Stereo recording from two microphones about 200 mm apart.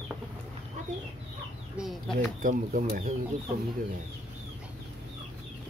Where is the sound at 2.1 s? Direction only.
45° right (ahead or behind).